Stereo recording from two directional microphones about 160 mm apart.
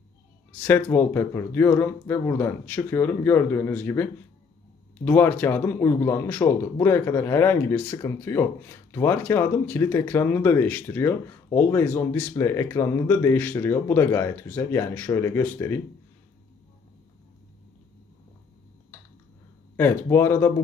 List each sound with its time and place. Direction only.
0.6 s speech: 10° left (ahead or behind)
19.8 s speech: 15° left (ahead or behind)